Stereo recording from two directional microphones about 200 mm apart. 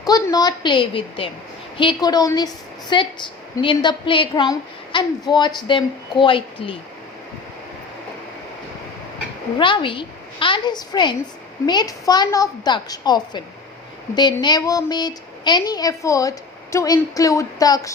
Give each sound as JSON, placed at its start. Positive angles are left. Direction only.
{"t": 0.0, "sound": "a woman's voice", "side_deg": 20}
{"t": 9.6, "sound": "a woman's voice", "side_deg": 25}
{"t": 14.4, "sound": "a woman's voice", "side_deg": 20}